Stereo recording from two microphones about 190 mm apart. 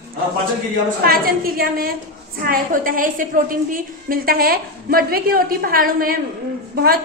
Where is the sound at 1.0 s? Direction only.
50° right (ahead or behind).